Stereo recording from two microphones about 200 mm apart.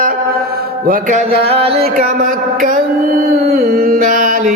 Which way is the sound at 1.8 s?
45° right (ahead or behind).